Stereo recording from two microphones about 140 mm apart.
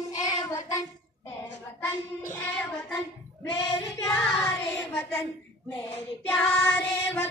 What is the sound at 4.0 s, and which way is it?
Singing, 10° left (ahead or behind).